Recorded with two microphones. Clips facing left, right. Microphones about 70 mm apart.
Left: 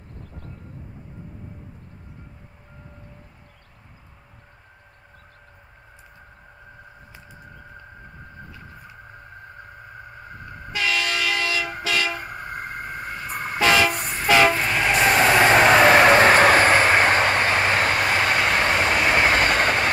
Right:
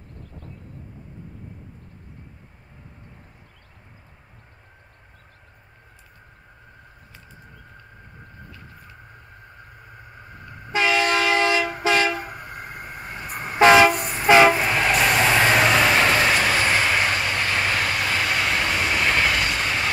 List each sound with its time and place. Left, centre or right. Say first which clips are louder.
10.7 s train: right 5 dB; right
12.4 s train: left 4 dB; left
13.4 s train: right 6 dB; right
13.9 s train: right 1 dB; right
14.2 s train: right 3 dB; centre
14.7 s train: right 1 dB; centre
15.4 s vehicle: left 4 dB; left